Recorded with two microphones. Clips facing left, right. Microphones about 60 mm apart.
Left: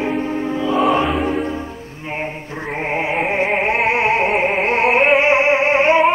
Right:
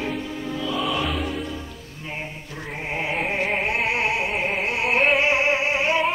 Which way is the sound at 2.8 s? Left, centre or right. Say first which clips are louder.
Left 6 dB; left.